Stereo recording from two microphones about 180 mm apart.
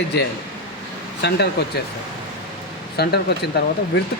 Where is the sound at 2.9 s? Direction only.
65° left (ahead or behind).